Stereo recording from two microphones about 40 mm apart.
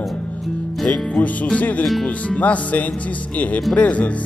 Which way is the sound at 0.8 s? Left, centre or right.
Left.